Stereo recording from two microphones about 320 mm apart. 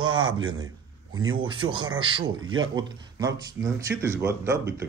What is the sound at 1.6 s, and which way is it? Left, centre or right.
Speech, centre.